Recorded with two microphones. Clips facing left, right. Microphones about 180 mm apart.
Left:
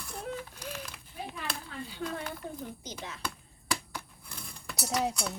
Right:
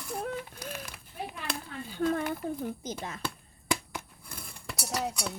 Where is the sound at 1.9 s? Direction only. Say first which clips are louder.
Right 9 dB; 50° right (ahead or behind).